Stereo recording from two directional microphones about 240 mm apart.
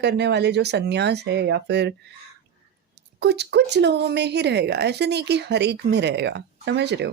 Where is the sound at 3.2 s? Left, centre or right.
Right.